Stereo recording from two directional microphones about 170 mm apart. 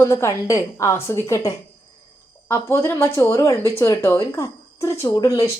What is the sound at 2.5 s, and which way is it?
Speech, 15° left (ahead or behind).